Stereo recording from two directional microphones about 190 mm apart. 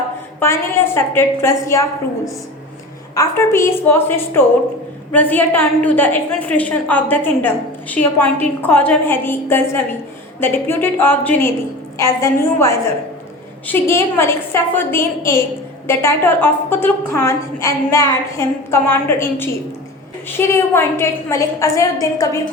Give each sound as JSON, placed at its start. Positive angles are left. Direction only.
{"t": 0.4, "sound": "a woman's voice", "side_deg": 10}